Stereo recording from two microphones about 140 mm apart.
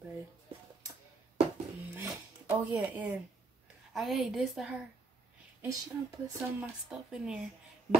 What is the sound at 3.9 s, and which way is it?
Speech, centre (ahead or behind).